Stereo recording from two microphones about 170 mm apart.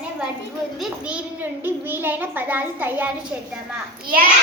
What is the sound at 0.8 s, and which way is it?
A child's voice, 5° right (ahead or behind).